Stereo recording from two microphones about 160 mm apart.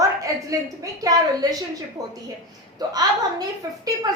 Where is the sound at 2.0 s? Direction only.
20° right (ahead or behind).